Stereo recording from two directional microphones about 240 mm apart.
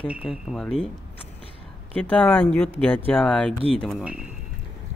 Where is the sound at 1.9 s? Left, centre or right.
Centre.